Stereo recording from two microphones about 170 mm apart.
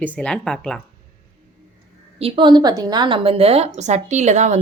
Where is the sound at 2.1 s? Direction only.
35° right (ahead or behind).